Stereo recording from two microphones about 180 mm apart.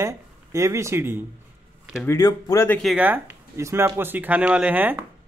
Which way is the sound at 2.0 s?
20° left (ahead or behind).